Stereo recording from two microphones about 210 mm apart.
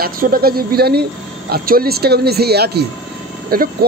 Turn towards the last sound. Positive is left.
turn(degrees=-45)  # may be behind; listen again after turning